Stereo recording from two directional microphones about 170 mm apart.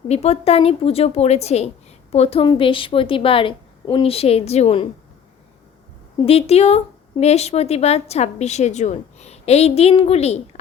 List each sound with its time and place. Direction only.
0.1 s a woman's voice: 40° left (ahead or behind)
6.2 s a woman's voice: 35° left (ahead or behind)